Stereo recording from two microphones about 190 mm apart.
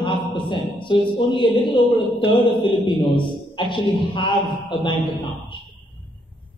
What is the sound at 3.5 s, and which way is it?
Speech, 25° left (ahead or behind).